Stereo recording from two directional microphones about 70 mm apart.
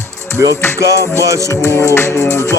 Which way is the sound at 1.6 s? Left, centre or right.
Left.